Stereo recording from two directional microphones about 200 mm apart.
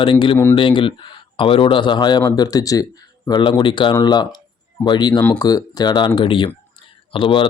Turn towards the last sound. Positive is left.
turn(degrees=25)  # may be behind; listen again after turning